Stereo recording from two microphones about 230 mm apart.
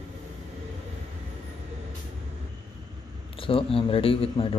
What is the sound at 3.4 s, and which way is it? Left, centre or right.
A man's voice, left.